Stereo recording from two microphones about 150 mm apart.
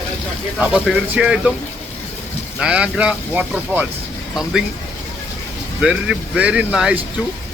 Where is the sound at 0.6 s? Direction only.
10° right (ahead or behind).